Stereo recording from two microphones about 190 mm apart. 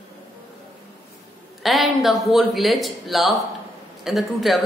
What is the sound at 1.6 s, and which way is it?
A woman's voice, centre (ahead or behind).